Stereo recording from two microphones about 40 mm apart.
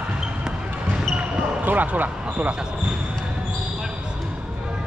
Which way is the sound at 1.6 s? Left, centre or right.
Right.